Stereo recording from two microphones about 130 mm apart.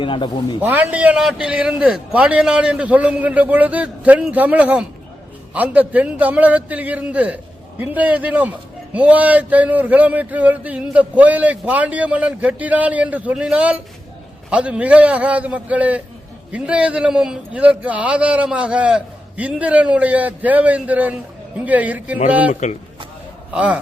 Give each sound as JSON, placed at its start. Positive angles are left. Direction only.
{"t": 0.0, "sound": "a man's voice", "side_deg": 40}
{"t": 0.6, "sound": "a man's voice", "side_deg": -15}
{"t": 23.6, "sound": "a man's voice", "side_deg": -10}